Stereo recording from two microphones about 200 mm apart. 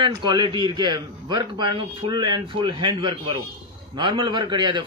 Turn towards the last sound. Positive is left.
turn(degrees=-25)  # may be behind; listen again after turning